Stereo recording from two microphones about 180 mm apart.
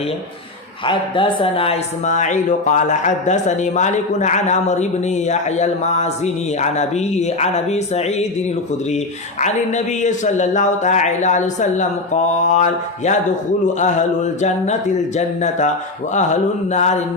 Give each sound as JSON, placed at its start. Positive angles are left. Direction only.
{"t": 0.9, "sound": "speech", "side_deg": 25}
{"t": 9.4, "sound": "speech", "side_deg": 40}
{"t": 14.4, "sound": "speech", "side_deg": 40}